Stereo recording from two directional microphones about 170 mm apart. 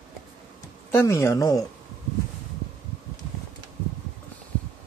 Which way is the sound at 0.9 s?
15° left (ahead or behind).